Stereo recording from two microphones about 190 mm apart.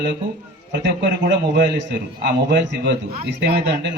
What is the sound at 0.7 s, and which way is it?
A man's voice, 65° right (ahead or behind).